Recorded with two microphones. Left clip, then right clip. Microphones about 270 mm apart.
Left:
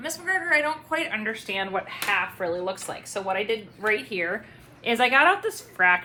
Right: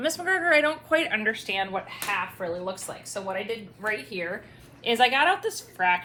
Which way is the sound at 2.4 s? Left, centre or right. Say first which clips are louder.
Left 3 dB; left.